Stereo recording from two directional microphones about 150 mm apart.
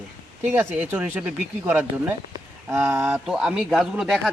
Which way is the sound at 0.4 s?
15° right (ahead or behind).